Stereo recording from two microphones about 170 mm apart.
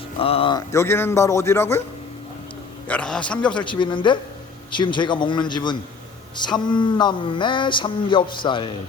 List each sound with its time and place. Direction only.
0.2 s speech: 35° left (ahead or behind)
0.7 s speech: 15° left (ahead or behind)
2.8 s speech: 5° left (ahead or behind)
3.6 s speech: 30° left (ahead or behind)